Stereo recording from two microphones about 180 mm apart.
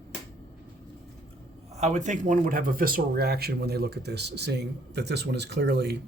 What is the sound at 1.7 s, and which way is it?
Speech, 40° right (ahead or behind).